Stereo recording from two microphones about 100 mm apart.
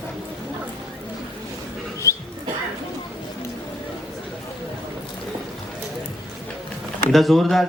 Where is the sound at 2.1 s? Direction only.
30° left (ahead or behind).